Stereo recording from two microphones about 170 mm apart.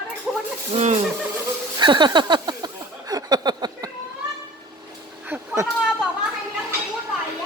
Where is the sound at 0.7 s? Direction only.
40° right (ahead or behind).